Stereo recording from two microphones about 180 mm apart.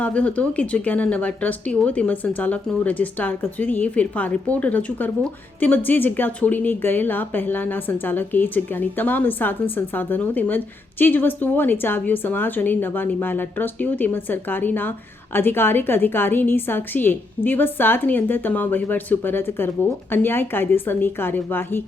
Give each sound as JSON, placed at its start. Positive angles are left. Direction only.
{"t": 0.0, "sound": "a woman's voice", "side_deg": 5}